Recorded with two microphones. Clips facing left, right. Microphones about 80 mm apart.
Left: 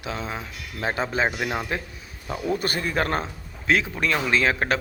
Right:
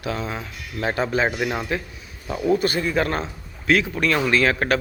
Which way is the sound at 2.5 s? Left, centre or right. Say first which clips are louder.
Right 4 dB; left.